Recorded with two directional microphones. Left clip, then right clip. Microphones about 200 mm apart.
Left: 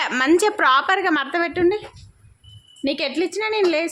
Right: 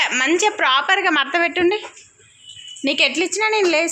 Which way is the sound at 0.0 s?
35° left (ahead or behind).